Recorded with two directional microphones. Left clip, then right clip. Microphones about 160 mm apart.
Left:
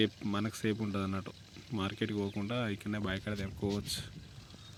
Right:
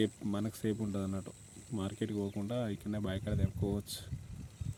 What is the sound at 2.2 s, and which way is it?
Speech, 5° left (ahead or behind).